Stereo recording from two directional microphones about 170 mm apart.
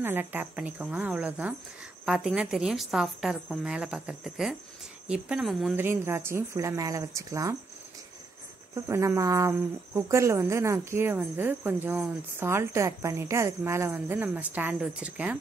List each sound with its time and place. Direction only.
0.0 s a woman's voice: 10° right (ahead or behind)
5.8 s speech: 15° right (ahead or behind)
8.7 s speech: 15° right (ahead or behind)